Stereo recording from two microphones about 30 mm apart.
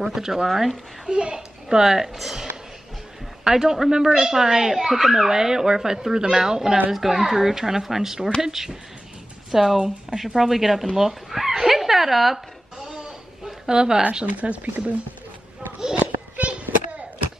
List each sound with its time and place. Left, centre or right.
0.0 s speech: centre
0.5 s speech: centre
1.0 s speech: right; by 2.4 s centre
3.4 s speech: centre
6.9 s speech: centre
11.6 s dog: centre
12.7 s a sound: right
13.7 s speech: right
14.4 s speech: right
16.0 s children playing: right